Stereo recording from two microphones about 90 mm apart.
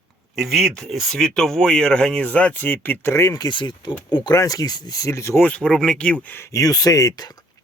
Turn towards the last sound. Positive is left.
turn(degrees=40)  # may be behind; listen again after turning